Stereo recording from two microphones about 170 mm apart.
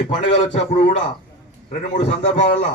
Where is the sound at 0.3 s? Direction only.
45° left (ahead or behind).